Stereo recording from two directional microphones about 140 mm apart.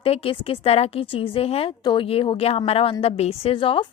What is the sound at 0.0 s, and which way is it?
A woman's voice, 40° left (ahead or behind).